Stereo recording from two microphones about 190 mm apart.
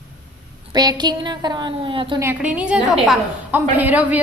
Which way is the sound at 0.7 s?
20° right (ahead or behind).